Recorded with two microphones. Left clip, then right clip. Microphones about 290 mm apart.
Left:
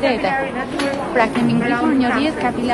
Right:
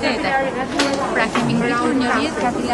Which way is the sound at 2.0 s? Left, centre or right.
Left.